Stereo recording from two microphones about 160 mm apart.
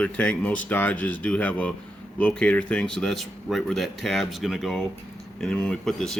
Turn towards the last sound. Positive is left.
turn(degrees=5)  # may be behind; listen again after turning